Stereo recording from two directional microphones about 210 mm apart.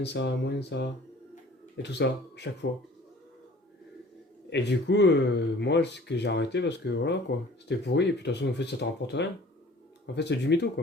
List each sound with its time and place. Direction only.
0.0 s speech: 55° left (ahead or behind)
4.4 s speech: 55° left (ahead or behind)